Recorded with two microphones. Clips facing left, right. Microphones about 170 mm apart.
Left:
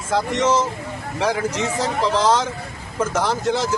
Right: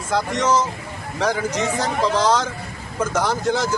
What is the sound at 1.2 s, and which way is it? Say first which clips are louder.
Speech: even; 5° left (ahead or behind).